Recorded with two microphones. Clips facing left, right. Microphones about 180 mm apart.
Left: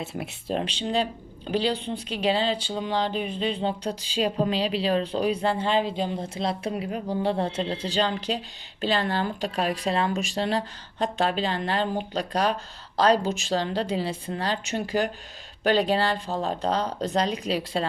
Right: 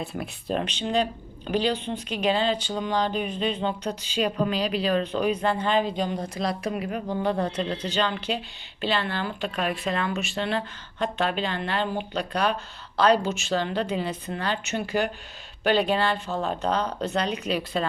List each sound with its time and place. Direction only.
0.0 s speech: 25° left (ahead or behind)